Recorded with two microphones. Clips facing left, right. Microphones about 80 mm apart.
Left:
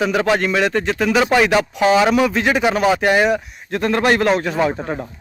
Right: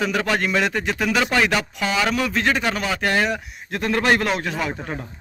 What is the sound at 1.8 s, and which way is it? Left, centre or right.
Speech, centre.